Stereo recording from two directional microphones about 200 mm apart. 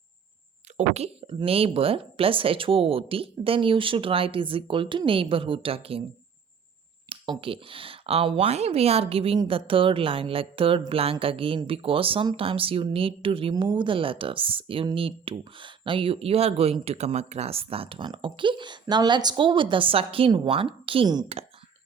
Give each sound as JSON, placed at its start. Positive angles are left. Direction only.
{"t": 0.8, "sound": "speech", "side_deg": -30}
{"t": 7.1, "sound": "speech", "side_deg": -25}